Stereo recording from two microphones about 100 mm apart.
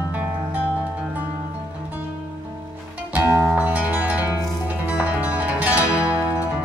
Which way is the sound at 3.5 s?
15° right (ahead or behind).